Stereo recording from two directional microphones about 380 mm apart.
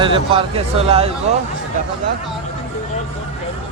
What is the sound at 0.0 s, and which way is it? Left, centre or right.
Speech, centre.